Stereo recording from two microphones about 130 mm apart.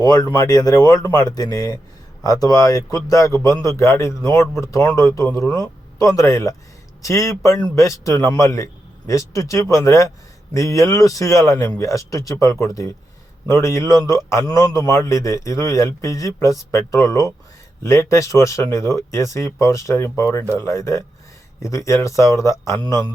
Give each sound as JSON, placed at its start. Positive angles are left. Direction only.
{"t": 0.0, "sound": "a man's voice", "side_deg": 30}